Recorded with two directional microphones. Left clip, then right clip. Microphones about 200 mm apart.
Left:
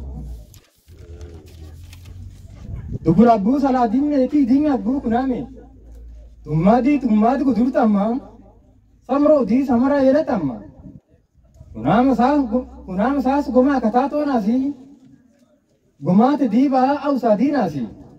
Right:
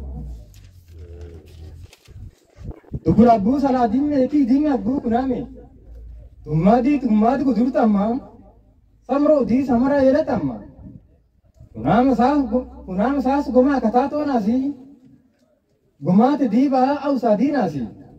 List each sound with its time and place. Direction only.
3.2 s speech: 10° right (ahead or behind)
6.4 s speech: 10° right (ahead or behind)
11.7 s speech: 10° right (ahead or behind)
16.0 s speech: 10° right (ahead or behind)